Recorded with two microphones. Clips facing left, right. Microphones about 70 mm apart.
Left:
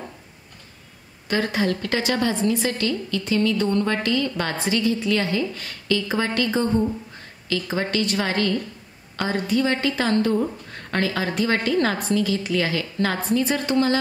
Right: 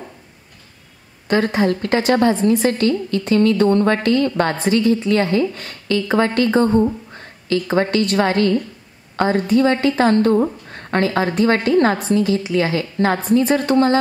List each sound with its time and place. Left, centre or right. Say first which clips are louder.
1.2 s a woman's voice: right 6 dB; right